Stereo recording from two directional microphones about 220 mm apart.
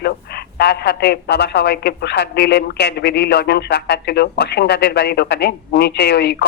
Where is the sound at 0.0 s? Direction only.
45° left (ahead or behind).